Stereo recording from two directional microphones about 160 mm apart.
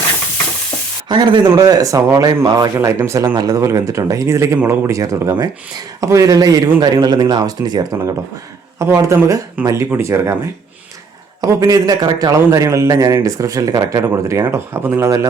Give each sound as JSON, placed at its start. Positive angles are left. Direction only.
{"t": 1.0, "sound": "speech", "side_deg": -30}
{"t": 11.3, "sound": "speech", "side_deg": -20}